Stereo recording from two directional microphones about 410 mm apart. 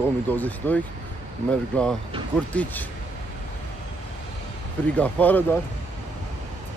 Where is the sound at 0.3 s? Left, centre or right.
Centre.